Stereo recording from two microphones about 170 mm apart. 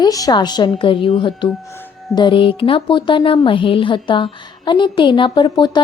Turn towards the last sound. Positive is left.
turn(degrees=30)  # may be behind; listen again after turning